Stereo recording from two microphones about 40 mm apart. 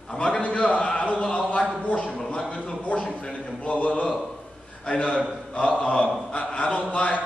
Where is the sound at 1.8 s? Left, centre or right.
Left.